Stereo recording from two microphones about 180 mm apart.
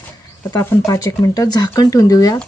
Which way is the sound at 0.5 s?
15° left (ahead or behind).